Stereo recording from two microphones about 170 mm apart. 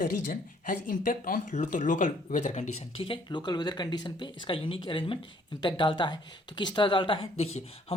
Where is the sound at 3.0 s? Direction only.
30° left (ahead or behind).